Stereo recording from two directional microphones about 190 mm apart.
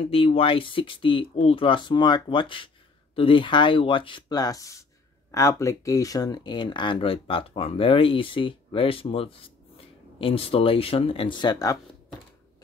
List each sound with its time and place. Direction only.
0.0 s speech: 30° left (ahead or behind)